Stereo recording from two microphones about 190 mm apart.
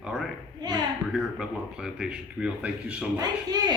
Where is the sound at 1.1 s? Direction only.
Centre (ahead or behind).